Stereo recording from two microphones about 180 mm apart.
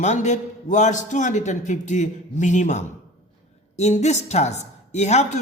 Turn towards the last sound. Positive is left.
turn(degrees=40)  # may be behind; listen again after turning